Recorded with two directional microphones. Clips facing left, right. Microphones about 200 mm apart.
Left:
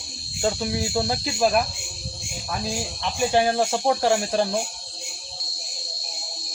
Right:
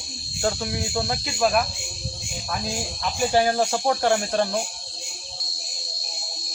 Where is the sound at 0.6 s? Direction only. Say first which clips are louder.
Left 2 dB; 25° left (ahead or behind).